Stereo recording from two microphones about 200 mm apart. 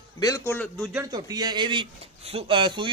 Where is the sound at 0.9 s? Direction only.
20° right (ahead or behind).